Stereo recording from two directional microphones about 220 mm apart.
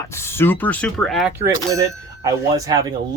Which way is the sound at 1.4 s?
15° right (ahead or behind).